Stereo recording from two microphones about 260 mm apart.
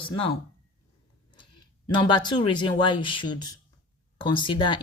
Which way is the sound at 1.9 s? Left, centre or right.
Centre.